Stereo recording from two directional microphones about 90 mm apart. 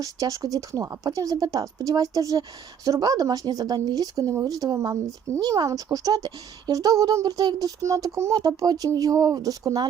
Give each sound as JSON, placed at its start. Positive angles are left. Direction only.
{"t": 0.0, "sound": "speech", "side_deg": -40}